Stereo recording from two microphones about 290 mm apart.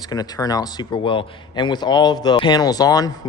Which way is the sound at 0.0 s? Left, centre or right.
Centre.